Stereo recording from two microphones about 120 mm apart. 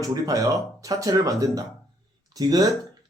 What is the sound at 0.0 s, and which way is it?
A man's voice, 30° right (ahead or behind).